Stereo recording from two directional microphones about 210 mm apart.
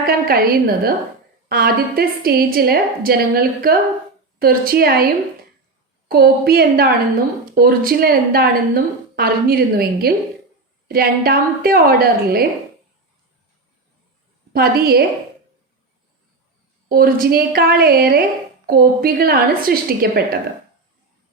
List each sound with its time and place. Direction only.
0.0 s a woman's voice: 45° right (ahead or behind)
6.1 s a woman's voice: 50° right (ahead or behind)
14.5 s a woman's voice: 45° right (ahead or behind)
16.9 s a woman's voice: 45° right (ahead or behind)